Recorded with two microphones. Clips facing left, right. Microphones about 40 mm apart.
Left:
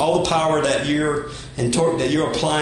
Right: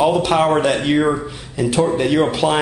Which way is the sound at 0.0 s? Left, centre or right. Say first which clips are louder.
Right 3 dB; centre.